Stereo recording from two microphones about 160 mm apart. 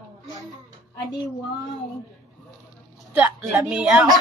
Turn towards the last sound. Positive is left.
turn(degrees=-5)  # may be behind; listen again after turning